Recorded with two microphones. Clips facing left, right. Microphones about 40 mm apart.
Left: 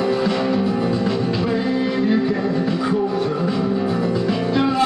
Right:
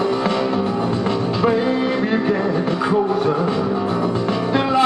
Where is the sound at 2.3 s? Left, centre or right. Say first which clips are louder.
Right 2 dB; centre.